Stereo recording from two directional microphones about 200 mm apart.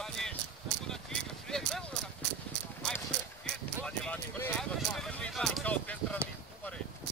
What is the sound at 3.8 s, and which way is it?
Clip-clop, 10° left (ahead or behind).